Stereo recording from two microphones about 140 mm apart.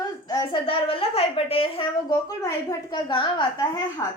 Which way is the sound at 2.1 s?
20° left (ahead or behind).